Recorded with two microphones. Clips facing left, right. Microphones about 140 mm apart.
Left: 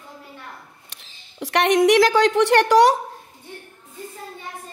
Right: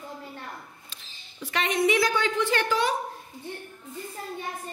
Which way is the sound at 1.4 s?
75° left (ahead or behind).